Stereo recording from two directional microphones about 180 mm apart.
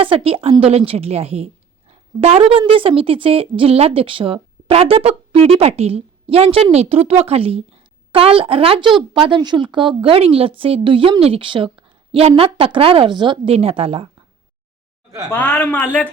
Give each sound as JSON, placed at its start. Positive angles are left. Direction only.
{"t": 0.0, "sound": "a woman's voice", "side_deg": -30}
{"t": 15.3, "sound": "speech", "side_deg": 10}